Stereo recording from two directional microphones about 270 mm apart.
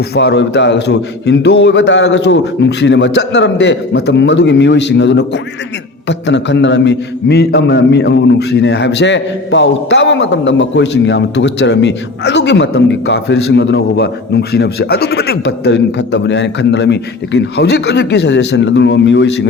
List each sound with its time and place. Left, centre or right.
0.1 s a man's voice: left